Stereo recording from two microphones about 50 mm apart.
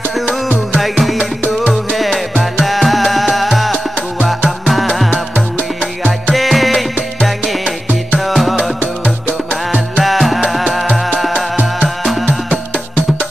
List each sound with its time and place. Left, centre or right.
0.7 s music: centre
6.3 s music: centre
9.0 s music: centre
10.0 s music: centre